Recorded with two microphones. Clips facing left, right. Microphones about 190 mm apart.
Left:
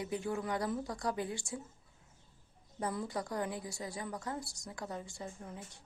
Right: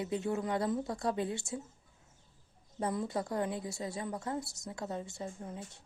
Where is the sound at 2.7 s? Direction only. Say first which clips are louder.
Right 3 dB; 25° right (ahead or behind).